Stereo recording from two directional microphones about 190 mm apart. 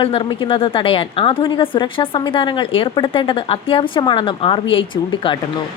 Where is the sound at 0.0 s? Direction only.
30° left (ahead or behind).